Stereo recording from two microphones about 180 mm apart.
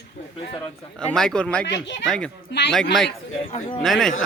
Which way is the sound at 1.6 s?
80° left.